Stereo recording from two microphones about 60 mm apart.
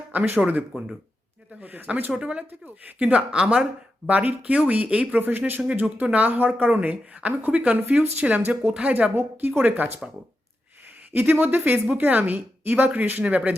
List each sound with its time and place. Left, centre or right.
0.1 s speech: right
2.1 s speech: centre
5.6 s speech: centre
6.0 s a woman's voice: right
11.1 s a woman's voice: right